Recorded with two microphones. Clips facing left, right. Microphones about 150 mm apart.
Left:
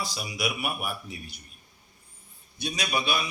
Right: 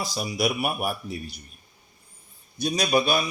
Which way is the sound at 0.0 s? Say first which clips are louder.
Right 5 dB; 40° right (ahead or behind).